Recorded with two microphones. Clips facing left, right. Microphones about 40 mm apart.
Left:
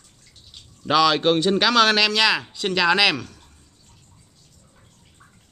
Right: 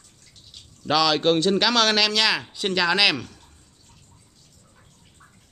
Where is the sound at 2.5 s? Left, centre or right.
Centre.